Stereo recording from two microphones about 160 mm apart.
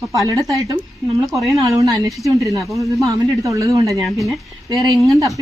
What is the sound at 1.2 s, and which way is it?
Speech, centre (ahead or behind).